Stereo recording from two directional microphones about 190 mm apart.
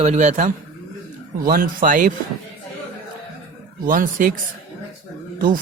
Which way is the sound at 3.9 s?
45° right (ahead or behind).